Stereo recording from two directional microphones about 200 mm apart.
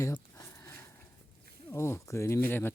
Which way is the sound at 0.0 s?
15° left (ahead or behind).